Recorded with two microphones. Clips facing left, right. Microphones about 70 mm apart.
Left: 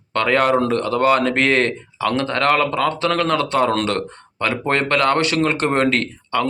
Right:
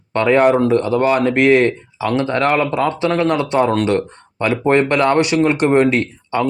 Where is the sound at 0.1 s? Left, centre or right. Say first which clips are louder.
Right 4 dB; right.